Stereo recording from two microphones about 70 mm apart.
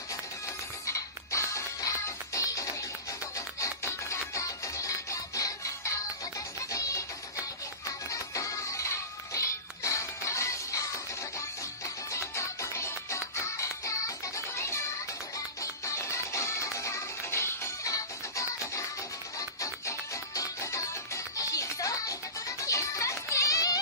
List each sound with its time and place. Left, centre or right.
0.8 s music: left
8.1 s music: left
17.8 s music: left